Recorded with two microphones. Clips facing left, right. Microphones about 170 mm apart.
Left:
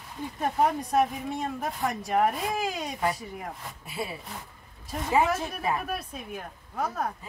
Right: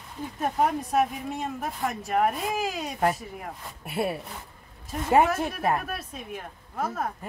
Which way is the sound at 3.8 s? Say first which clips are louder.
Right 7 dB; 60° right (ahead or behind).